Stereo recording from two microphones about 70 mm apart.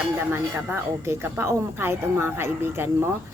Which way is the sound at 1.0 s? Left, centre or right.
Right.